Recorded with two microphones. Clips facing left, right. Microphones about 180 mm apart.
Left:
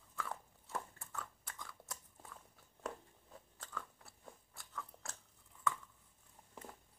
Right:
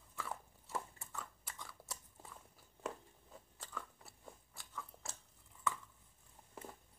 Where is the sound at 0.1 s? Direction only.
5° right (ahead or behind).